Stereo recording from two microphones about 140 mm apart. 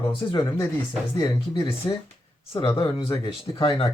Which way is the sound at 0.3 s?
35° left (ahead or behind).